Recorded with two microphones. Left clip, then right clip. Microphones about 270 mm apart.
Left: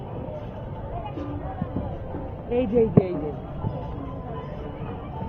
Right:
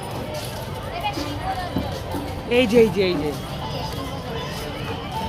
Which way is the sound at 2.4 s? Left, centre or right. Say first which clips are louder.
Right 6 dB; right.